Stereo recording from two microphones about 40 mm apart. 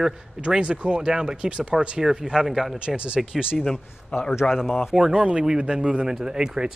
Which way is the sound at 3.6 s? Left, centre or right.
Centre.